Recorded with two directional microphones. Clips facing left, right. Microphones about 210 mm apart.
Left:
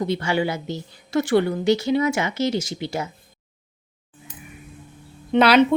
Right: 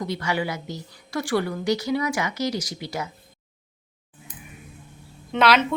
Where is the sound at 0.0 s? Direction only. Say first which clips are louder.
Left 4 dB; 25° left (ahead or behind).